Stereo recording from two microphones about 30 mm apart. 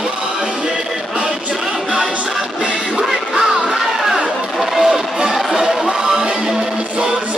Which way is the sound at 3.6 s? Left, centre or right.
Centre.